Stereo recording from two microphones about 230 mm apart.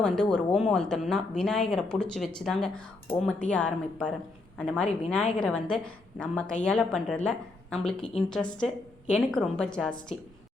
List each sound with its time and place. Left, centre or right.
0.0 s a woman's voice: centre